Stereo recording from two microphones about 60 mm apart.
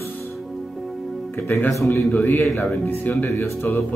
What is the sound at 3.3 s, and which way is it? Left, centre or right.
Speech, left.